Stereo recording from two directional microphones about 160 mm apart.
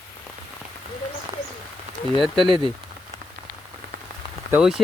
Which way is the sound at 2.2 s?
Centre (ahead or behind).